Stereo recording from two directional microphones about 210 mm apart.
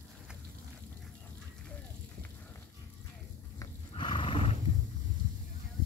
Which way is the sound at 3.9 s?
25° left (ahead or behind).